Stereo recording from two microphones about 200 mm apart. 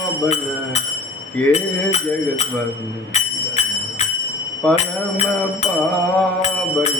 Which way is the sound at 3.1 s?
35° left (ahead or behind).